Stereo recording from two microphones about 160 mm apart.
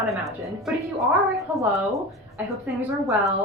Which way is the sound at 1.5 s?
10° right (ahead or behind).